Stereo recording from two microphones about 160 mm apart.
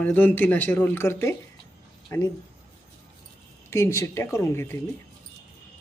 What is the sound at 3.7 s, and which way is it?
Speech, 15° left (ahead or behind).